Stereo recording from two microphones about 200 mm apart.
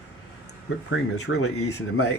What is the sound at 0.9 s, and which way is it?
Speech, 90° left.